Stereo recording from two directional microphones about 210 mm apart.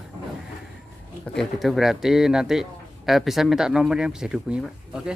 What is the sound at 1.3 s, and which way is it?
Speech, centre (ahead or behind).